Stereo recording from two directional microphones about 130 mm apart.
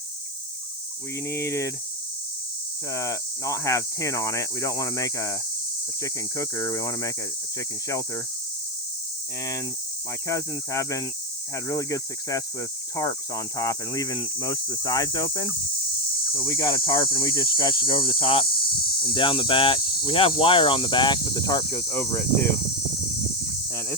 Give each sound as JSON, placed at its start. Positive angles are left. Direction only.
{"t": 1.3, "sound": "cricket", "side_deg": 20}
{"t": 2.9, "sound": "cricket", "side_deg": 25}
{"t": 10.2, "sound": "cricket", "side_deg": 25}
{"t": 16.3, "sound": "speech", "side_deg": 25}